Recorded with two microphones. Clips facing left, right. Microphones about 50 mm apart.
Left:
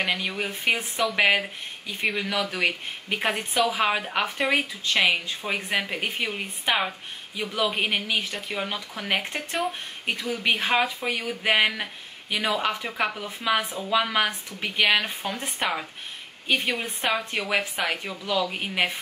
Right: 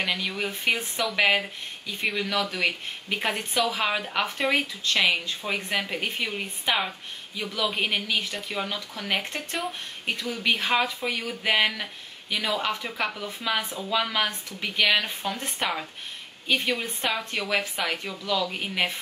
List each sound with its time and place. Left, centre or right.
0.0 s speech: centre
7.3 s speech: left
8.2 s speech: centre
8.6 s speech: centre
16.4 s speech: left